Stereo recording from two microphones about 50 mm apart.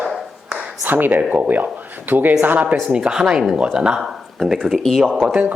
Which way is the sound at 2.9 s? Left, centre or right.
Centre.